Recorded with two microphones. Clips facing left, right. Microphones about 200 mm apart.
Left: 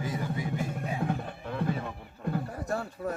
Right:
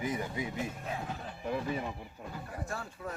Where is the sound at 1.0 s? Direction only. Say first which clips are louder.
Left 9 dB; 60° left (ahead or behind).